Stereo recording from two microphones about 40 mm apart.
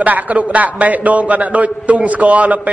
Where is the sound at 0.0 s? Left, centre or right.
Right.